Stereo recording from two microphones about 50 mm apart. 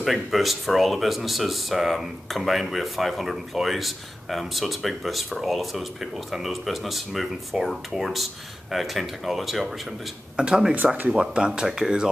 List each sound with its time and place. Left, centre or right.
0.0 s speech: centre
10.3 s speech: centre